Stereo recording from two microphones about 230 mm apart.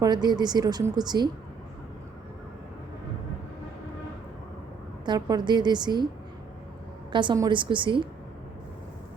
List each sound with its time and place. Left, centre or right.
0.0 s speech: centre
5.0 s a woman's voice: centre
7.1 s a woman's voice: centre